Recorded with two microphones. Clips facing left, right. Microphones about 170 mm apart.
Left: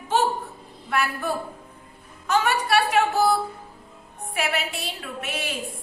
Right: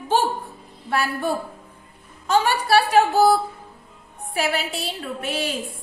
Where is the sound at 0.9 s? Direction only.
30° right (ahead or behind).